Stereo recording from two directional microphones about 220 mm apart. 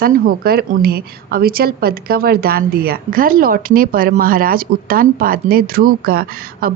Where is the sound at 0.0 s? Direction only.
40° right (ahead or behind).